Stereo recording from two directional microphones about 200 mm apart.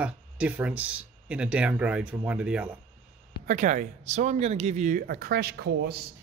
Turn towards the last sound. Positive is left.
turn(degrees=-50)  # may be behind; listen again after turning